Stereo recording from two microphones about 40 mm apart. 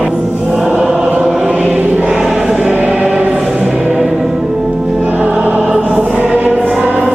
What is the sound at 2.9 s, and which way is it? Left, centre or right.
Choir, right.